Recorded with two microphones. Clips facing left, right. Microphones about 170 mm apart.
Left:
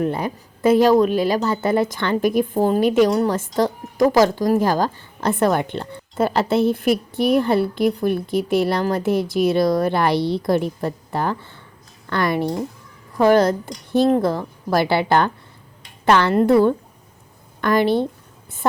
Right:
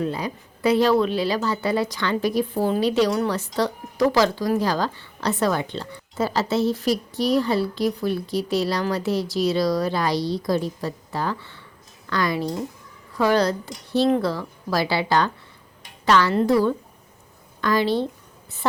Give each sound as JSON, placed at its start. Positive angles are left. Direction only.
{"t": 0.0, "sound": "a woman's voice", "side_deg": 55}
{"t": 13.1, "sound": "a woman's voice", "side_deg": 50}